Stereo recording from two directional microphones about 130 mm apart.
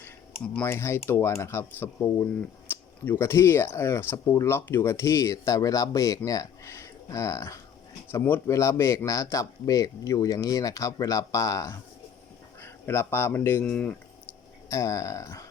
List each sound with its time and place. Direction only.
0.6 s speech: 20° left (ahead or behind)
14.7 s speech: 25° left (ahead or behind)